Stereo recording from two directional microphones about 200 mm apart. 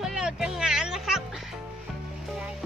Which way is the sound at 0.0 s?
Centre (ahead or behind).